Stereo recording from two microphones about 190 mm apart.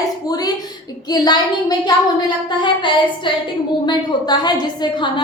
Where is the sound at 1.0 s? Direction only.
20° left (ahead or behind).